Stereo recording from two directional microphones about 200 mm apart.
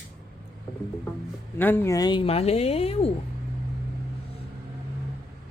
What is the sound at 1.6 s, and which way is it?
A woman's voice, 10° left (ahead or behind).